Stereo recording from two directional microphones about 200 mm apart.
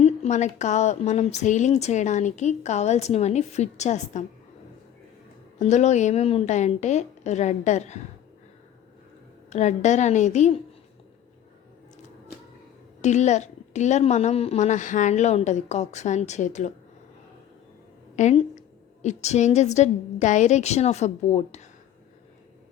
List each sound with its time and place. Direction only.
0.0 s a woman's voice: 35° left (ahead or behind)
5.5 s a woman's voice: 35° left (ahead or behind)
9.5 s a woman's voice: 35° left (ahead or behind)
13.0 s a woman's voice: 35° left (ahead or behind)
18.2 s a woman's voice: 35° left (ahead or behind)